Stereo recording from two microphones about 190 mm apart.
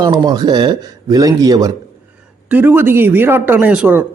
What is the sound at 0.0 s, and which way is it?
Speech, 20° right (ahead or behind).